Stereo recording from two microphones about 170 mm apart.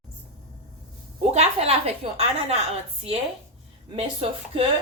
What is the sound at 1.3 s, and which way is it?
Speech, 40° right (ahead or behind).